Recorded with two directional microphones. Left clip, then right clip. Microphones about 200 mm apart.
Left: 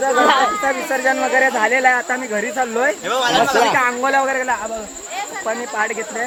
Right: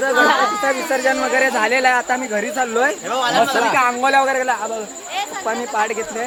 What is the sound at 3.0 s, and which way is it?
Speech, 35° left (ahead or behind).